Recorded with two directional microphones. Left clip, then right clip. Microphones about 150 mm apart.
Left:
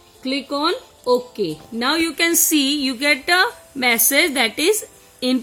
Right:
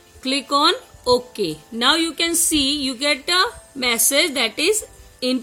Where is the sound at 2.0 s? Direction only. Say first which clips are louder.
Left 3 dB; 30° left (ahead or behind).